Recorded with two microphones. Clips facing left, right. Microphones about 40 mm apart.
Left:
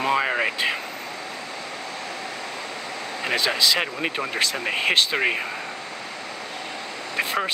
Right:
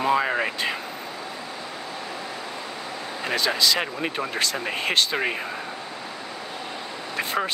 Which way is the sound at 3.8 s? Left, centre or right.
Centre.